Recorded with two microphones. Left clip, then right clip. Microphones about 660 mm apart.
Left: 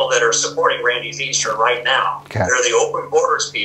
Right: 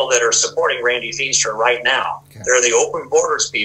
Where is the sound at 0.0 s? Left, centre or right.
Right.